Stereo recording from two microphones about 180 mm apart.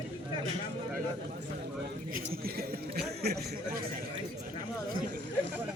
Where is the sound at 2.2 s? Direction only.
55° right (ahead or behind).